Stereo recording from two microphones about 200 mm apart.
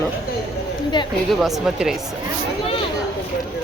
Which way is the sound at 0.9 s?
20° left (ahead or behind).